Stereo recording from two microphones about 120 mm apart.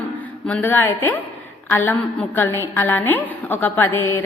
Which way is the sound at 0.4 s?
15° left (ahead or behind).